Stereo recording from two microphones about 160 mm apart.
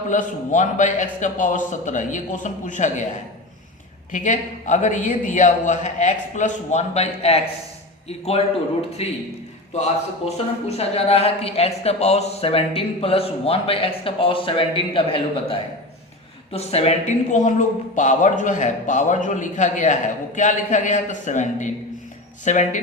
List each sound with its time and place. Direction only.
0.1 s a man's voice: 50° left (ahead or behind)
4.1 s a man's voice: 50° left (ahead or behind)